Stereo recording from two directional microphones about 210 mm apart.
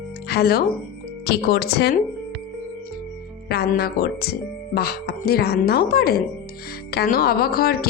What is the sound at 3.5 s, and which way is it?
Speech, 50° left (ahead or behind).